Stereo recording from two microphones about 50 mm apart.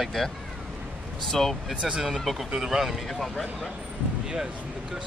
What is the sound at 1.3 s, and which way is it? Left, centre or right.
Speech, centre.